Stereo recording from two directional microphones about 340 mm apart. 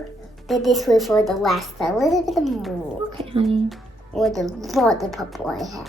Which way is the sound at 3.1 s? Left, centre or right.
Centre.